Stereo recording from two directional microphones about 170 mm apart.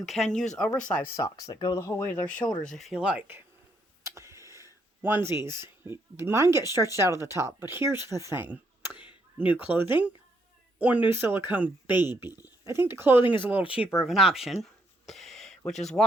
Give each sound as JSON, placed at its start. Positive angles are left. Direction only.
{"t": 0.0, "sound": "speech", "side_deg": 0}
{"t": 1.1, "sound": "speech", "side_deg": 20}
{"t": 2.6, "sound": "speech", "side_deg": 0}
{"t": 4.0, "sound": "a sound", "side_deg": -15}
{"t": 5.0, "sound": "speech", "side_deg": -10}
{"t": 14.1, "sound": "a sound", "side_deg": 0}